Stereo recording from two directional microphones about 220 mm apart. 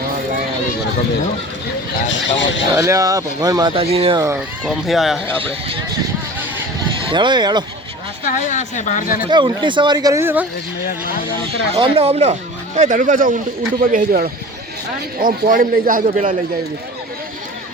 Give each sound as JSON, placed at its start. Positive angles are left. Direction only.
{"t": 2.0, "sound": "speech", "side_deg": 55}
{"t": 2.7, "sound": "speech", "side_deg": -15}
{"t": 4.2, "sound": "speech", "side_deg": -10}
{"t": 4.6, "sound": "speech", "side_deg": 0}
{"t": 7.1, "sound": "speech", "side_deg": -20}
{"t": 8.2, "sound": "speech", "side_deg": 35}
{"t": 9.3, "sound": "speech", "side_deg": -20}
{"t": 11.7, "sound": "speech", "side_deg": -25}